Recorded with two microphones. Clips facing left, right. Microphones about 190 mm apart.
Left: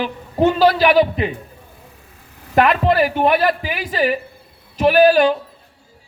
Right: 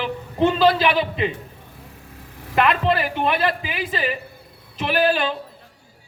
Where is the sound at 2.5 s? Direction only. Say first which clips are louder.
Left 4 dB; 45° left (ahead or behind).